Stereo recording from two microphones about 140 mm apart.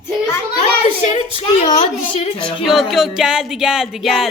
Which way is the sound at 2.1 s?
40° left (ahead or behind).